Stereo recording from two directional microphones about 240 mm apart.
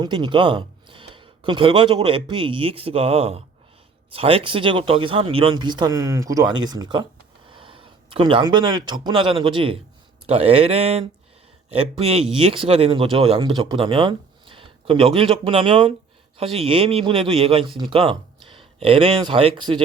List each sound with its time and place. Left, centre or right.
0.0 s speech: centre